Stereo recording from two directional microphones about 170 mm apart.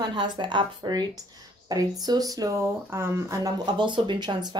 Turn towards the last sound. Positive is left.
turn(degrees=-25)  # may be behind; listen again after turning